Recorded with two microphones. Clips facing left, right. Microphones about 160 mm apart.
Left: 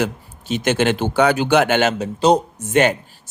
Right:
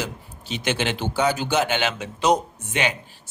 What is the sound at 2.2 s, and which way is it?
Speech, 30° left (ahead or behind).